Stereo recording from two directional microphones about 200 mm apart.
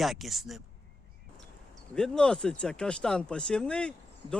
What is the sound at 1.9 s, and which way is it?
Speech, 5° left (ahead or behind).